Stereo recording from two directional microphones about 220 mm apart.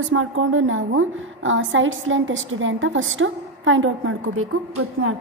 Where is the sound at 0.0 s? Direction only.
65° right (ahead or behind).